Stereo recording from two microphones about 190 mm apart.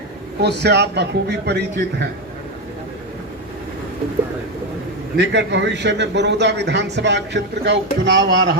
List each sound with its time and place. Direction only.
0.4 s a man's voice: 60° right (ahead or behind)
5.1 s a man's voice: 65° right (ahead or behind)